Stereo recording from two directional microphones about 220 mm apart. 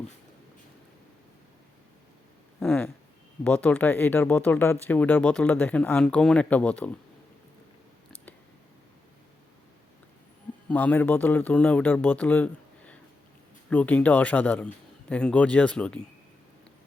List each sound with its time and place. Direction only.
2.6 s speech: 5° left (ahead or behind)
10.7 s speech: 5° left (ahead or behind)